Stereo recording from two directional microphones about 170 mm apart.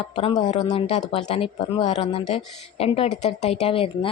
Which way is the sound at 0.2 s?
30° left (ahead or behind).